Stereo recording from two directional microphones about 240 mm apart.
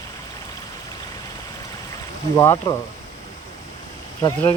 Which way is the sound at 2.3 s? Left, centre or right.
Centre.